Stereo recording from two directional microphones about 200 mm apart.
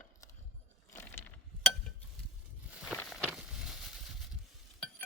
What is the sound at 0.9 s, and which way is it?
Chink, 10° left (ahead or behind).